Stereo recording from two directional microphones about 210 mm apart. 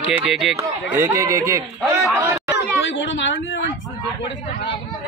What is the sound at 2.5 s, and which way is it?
Speech, 60° left (ahead or behind).